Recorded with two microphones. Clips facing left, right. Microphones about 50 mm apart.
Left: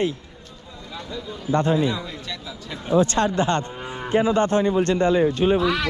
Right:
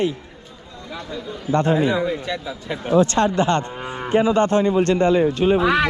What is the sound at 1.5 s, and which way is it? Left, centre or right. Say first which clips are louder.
Speech: right 2 dB; right.